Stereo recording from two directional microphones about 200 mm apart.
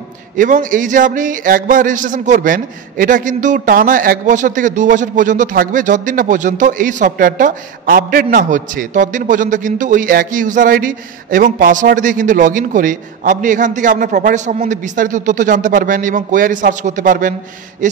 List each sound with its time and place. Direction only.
0.4 s a man's voice: 40° right (ahead or behind)